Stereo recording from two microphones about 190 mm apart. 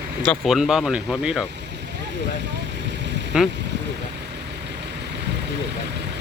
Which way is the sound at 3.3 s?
5° right (ahead or behind).